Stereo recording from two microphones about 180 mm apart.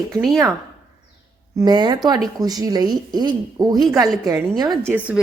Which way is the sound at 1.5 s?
20° right (ahead or behind).